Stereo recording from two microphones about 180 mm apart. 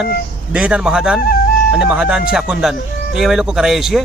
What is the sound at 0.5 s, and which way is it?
A man's voice, 5° right (ahead or behind).